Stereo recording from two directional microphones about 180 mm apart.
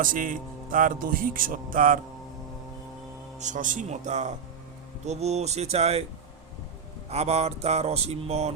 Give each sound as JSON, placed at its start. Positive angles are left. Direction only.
{"t": 0.0, "sound": "speech", "side_deg": -50}
{"t": 3.3, "sound": "mantra", "side_deg": -45}
{"t": 7.1, "sound": "mantra", "side_deg": -35}